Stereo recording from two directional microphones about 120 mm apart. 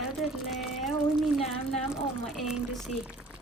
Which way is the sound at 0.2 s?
Centre (ahead or behind).